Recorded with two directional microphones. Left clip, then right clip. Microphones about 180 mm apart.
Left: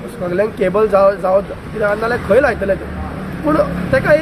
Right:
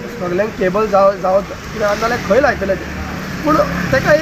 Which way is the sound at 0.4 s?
25° left (ahead or behind).